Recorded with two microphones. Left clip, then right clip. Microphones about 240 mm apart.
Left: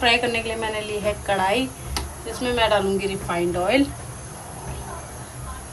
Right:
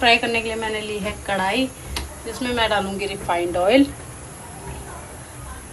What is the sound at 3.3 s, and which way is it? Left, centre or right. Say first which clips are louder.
Speech: right 4 dB; centre.